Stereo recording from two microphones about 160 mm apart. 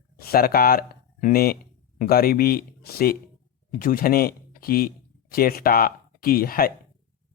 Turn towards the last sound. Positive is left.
turn(degrees=65)  # may be behind; listen again after turning